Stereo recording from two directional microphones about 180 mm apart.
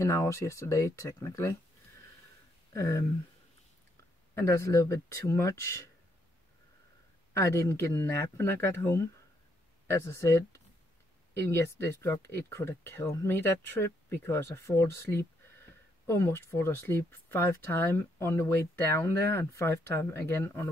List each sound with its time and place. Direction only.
0.0 s speech: 15° left (ahead or behind)
2.7 s speech: 15° left (ahead or behind)
4.4 s speech: 15° left (ahead or behind)
7.3 s speech: 15° left (ahead or behind)
11.6 s speech: 15° left (ahead or behind)
12.2 s speech: 65° right (ahead or behind)
12.4 s speech: 15° left (ahead or behind)